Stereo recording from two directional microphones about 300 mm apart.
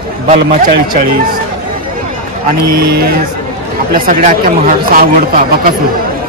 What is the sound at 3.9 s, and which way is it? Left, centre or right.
Speech, right.